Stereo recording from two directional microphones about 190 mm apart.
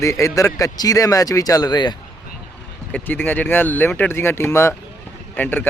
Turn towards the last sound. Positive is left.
turn(degrees=10)  # may be behind; listen again after turning